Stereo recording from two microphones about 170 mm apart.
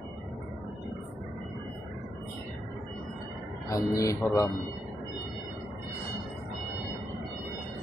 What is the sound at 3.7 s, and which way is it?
Speech, 20° left (ahead or behind).